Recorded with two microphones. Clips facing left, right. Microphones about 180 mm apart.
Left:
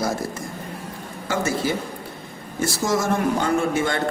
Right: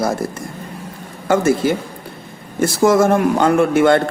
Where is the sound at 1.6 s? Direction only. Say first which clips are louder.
Right 6 dB; 55° right (ahead or behind).